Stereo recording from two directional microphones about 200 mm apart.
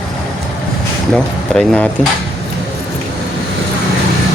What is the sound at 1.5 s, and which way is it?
Speech, 5° left (ahead or behind).